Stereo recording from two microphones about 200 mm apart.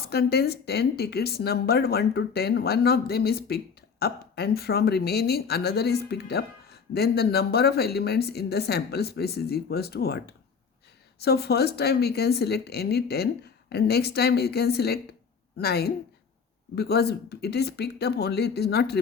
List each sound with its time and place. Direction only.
0.0 s speech: 50° left (ahead or behind)
11.2 s speech: 55° left (ahead or behind)